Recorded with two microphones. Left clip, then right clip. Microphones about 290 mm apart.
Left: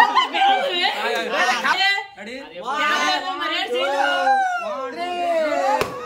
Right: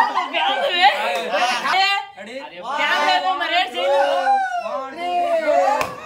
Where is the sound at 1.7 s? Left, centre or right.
Centre.